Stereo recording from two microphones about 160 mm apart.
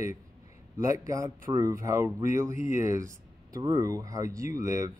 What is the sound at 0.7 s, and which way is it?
A man's voice, 20° right (ahead or behind).